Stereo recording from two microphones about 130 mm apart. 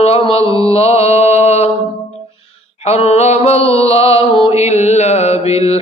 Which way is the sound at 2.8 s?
55° left (ahead or behind).